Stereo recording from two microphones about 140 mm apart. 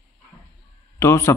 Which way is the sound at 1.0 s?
20° left (ahead or behind).